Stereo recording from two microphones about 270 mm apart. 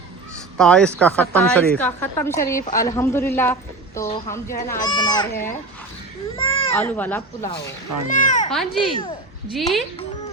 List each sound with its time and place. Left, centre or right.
0.5 s a woman's voice: centre
6.3 s baby cry: centre
6.7 s a woman's voice: centre
8.1 s speech: left
9.5 s a woman's voice: centre